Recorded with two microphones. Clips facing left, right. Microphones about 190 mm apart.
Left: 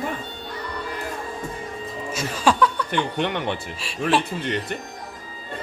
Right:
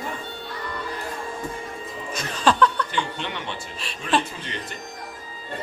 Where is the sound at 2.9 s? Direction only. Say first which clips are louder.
Left 5 dB; 60° left (ahead or behind).